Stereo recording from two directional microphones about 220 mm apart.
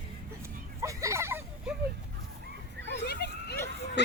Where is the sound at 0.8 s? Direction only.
15° right (ahead or behind).